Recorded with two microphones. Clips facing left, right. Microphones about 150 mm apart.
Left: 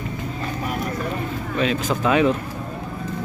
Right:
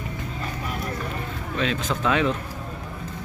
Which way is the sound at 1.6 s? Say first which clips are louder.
Left 4 dB; 10° left (ahead or behind).